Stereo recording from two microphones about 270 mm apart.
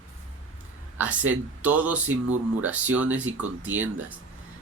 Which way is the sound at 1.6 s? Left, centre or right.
Centre.